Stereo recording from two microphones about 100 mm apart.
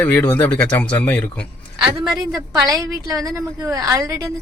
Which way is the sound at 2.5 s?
35° right (ahead or behind).